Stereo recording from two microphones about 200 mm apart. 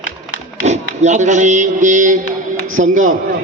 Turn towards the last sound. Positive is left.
turn(degrees=-40)  # may be behind; listen again after turning